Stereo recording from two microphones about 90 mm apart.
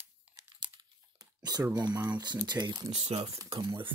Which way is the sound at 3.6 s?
60° right (ahead or behind).